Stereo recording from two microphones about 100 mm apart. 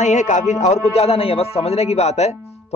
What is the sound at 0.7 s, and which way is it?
A man's voice, 90° left.